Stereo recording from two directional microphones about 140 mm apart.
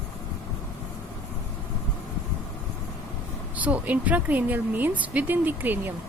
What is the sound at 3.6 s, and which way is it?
A woman's voice, 10° right (ahead or behind).